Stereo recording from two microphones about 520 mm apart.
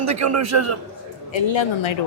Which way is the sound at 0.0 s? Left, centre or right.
Right.